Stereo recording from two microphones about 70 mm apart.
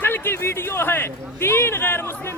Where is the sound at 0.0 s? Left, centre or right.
Left.